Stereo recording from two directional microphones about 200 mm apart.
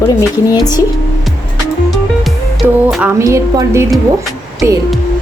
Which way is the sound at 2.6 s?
5° right (ahead or behind).